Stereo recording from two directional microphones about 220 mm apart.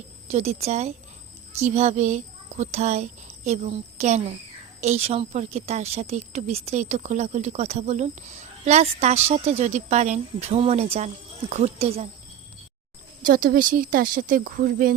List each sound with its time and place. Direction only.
0.3 s a child's voice: 30° right (ahead or behind)
13.2 s speech: 40° right (ahead or behind)